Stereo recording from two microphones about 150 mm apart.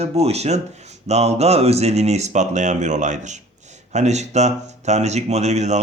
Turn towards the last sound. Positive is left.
turn(degrees=-50)  # may be behind; listen again after turning